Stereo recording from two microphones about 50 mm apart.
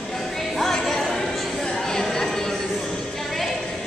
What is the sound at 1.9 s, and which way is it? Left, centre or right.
Chatter, centre.